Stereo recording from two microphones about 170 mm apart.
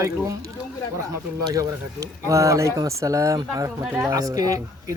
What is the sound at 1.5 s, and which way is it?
A man's voice, 20° right (ahead or behind).